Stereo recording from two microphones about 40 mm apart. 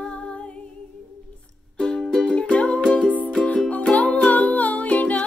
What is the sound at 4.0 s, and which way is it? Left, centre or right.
Music, left.